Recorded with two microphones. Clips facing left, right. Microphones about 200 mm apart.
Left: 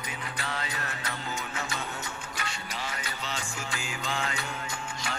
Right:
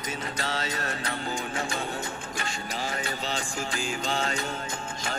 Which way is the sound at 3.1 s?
35° right (ahead or behind).